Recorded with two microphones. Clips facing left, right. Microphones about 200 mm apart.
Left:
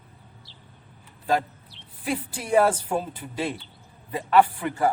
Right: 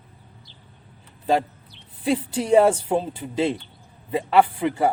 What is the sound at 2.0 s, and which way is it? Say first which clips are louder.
A man's voice: right 7 dB; 25° right (ahead or behind).